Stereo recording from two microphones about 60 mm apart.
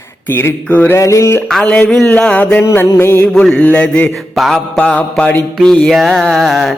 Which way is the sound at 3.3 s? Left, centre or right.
Centre.